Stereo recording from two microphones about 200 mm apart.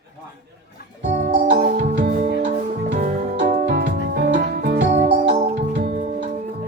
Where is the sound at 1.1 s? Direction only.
40° right (ahead or behind).